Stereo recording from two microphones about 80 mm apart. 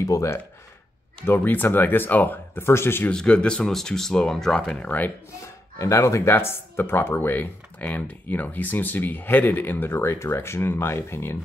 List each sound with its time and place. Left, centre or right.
0.0 s speech: left
1.2 s speech: left
3.1 s speech: centre
5.8 s speech: left